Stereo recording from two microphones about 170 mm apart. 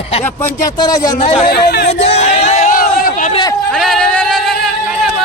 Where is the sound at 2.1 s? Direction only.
40° left (ahead or behind).